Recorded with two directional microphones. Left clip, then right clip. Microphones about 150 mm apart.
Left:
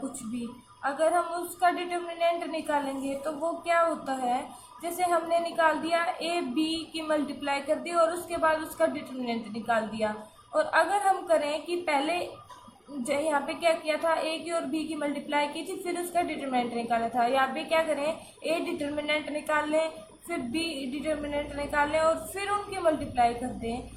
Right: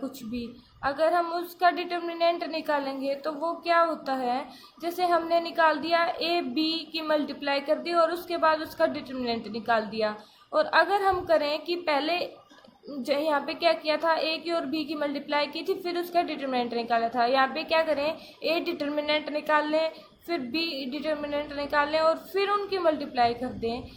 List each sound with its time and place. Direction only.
0.8 s a woman's voice: 60° right (ahead or behind)